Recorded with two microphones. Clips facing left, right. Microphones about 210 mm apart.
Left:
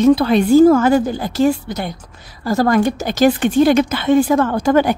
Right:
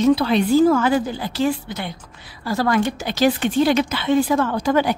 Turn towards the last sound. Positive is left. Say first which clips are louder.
# left 4 dB
turn(degrees=50)  # may be behind; listen again after turning